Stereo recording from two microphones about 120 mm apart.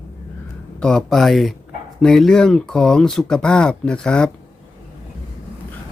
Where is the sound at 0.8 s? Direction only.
5° left (ahead or behind).